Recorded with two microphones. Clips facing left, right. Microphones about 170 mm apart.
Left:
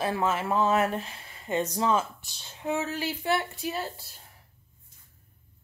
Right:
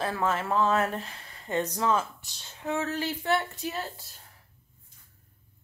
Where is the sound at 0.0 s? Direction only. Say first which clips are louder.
Left 1 dB; 15° left (ahead or behind).